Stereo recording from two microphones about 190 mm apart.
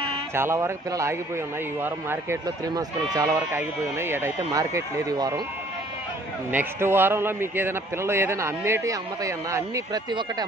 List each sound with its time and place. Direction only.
0.3 s a man's voice: 15° right (ahead or behind)
6.5 s a man's voice: 10° right (ahead or behind)